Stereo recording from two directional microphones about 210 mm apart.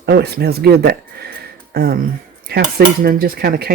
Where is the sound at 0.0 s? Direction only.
50° right (ahead or behind).